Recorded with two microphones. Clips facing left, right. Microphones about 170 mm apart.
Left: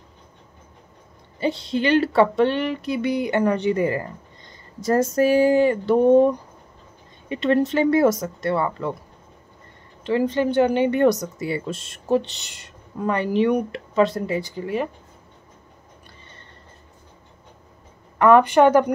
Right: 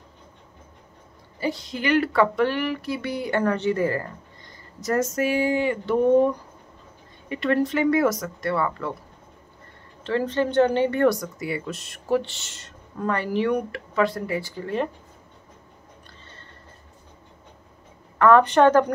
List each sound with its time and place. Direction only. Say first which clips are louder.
1.4 s speech: left 5 dB; 25° left (ahead or behind)
4.7 s speech: left 4 dB; 30° left (ahead or behind)
7.2 s speech: left 3 dB; 25° left (ahead or behind)
10.0 s speech: left 3 dB; 10° left (ahead or behind)
18.2 s speech: left 2 dB; 15° left (ahead or behind)